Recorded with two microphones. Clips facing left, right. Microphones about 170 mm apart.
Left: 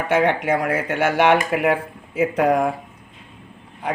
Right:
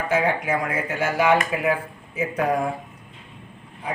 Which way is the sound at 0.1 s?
75° left (ahead or behind).